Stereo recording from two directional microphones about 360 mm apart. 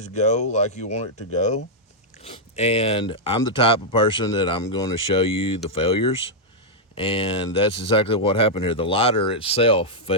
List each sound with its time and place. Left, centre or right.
0.0 s speech: centre